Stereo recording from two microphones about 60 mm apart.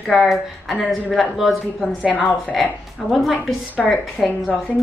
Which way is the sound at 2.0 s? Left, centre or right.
Left.